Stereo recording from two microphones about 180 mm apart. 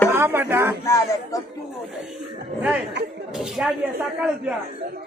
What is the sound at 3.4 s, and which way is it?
Speech, centre (ahead or behind).